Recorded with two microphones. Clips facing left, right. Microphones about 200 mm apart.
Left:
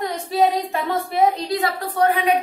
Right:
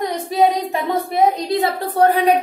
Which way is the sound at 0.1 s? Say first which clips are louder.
Right 2 dB; 20° right (ahead or behind).